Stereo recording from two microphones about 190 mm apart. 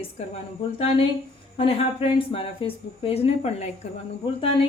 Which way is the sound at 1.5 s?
30° left (ahead or behind).